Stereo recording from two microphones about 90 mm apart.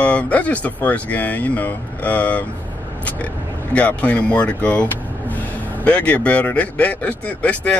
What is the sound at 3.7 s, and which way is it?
Speech, 15° left (ahead or behind).